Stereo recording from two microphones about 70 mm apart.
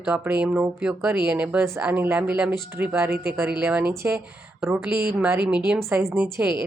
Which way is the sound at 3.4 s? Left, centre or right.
Centre.